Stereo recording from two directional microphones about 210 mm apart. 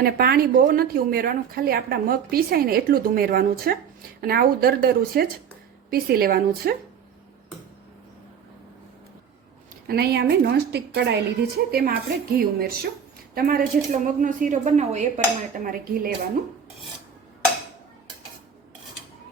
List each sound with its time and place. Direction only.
0.0 s a woman's voice: 45° right (ahead or behind)
9.8 s a woman's voice: 50° right (ahead or behind)